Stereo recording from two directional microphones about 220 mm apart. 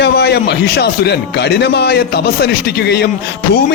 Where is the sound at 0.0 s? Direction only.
50° left (ahead or behind).